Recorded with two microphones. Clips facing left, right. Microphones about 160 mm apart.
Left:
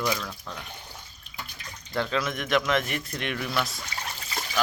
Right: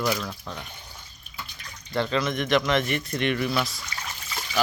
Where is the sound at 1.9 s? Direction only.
Centre (ahead or behind).